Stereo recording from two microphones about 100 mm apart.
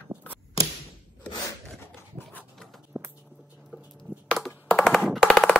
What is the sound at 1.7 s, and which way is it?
Dog, 20° left (ahead or behind).